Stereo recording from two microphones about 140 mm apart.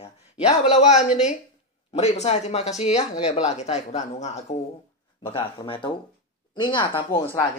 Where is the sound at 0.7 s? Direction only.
55° left (ahead or behind).